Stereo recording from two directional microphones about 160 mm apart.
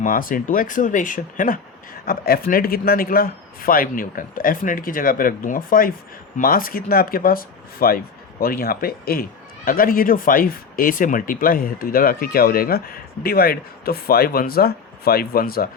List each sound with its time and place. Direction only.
0.0 s speech: 60° left (ahead or behind)
2.0 s speech: 70° left (ahead or behind)